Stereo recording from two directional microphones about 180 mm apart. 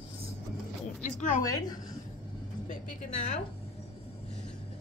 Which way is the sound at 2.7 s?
45° left (ahead or behind).